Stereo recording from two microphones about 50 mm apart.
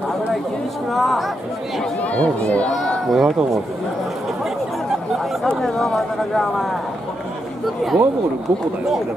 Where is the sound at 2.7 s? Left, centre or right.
Centre.